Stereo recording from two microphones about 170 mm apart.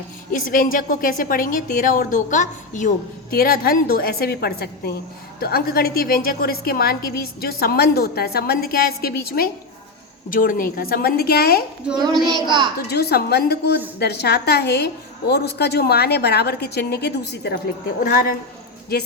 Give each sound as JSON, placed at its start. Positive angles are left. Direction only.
{"t": 0.3, "sound": "a woman's voice", "side_deg": 55}
{"t": 11.9, "sound": "a child's voice", "side_deg": -25}
{"t": 12.9, "sound": "a woman's voice", "side_deg": 70}
{"t": 18.0, "sound": "a woman's voice", "side_deg": 60}